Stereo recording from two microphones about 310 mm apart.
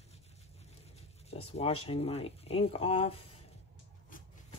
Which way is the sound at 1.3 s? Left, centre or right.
Centre.